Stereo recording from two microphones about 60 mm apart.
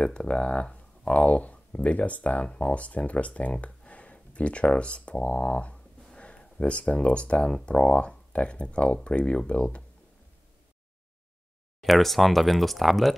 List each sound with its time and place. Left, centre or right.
0.0 s speech: centre
11.8 s speech: centre